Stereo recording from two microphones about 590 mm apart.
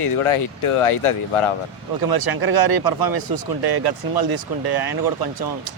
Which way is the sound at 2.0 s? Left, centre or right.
Right.